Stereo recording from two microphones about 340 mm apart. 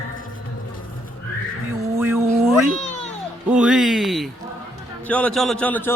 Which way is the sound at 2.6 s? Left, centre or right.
Centre.